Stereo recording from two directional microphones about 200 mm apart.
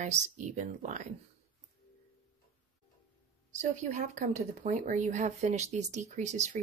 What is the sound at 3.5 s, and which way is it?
Speech, 35° right (ahead or behind).